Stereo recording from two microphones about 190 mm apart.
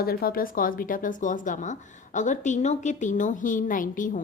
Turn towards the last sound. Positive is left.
turn(degrees=45)  # may be behind; listen again after turning